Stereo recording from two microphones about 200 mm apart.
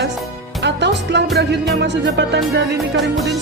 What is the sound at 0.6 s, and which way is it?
Music, 60° right (ahead or behind).